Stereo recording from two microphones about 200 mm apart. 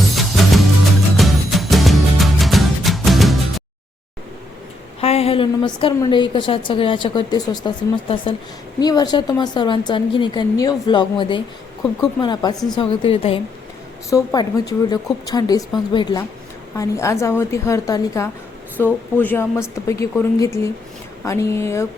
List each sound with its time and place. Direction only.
1.1 s music: centre (ahead or behind)
4.9 s a woman's voice: 30° left (ahead or behind)
14.1 s a woman's voice: 15° left (ahead or behind)